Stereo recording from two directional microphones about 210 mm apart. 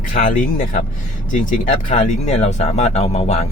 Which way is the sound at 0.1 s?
40° left (ahead or behind).